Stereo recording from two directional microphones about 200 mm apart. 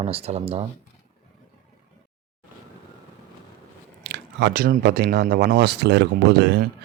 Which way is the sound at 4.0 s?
55° right (ahead or behind).